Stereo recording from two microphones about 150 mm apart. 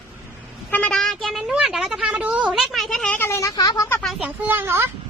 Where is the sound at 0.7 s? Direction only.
5° left (ahead or behind); by 3.9 s 25° left (ahead or behind).